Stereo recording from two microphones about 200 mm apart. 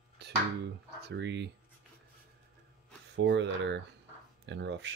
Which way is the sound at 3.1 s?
60° right (ahead or behind).